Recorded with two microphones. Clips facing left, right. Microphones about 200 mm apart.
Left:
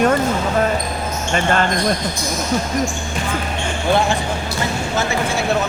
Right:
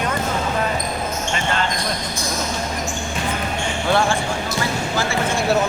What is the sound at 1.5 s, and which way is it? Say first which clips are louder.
Speech: left 5 dB; 50° left (ahead or behind).